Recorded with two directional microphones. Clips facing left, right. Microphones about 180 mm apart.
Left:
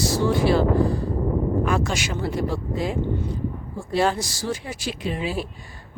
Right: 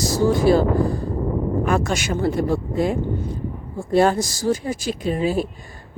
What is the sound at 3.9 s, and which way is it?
Speech, 45° right (ahead or behind).